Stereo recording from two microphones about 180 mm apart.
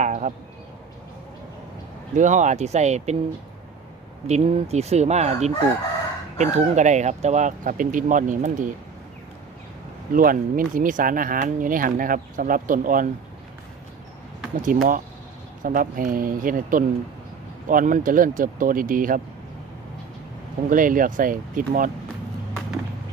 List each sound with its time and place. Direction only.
0.0 s a sound: 40° right (ahead or behind)
2.1 s speech: 45° right (ahead or behind)
4.3 s speech: 35° right (ahead or behind)
10.1 s speech: 50° right (ahead or behind)
14.6 s speech: 50° right (ahead or behind)
20.7 s speech: 50° right (ahead or behind)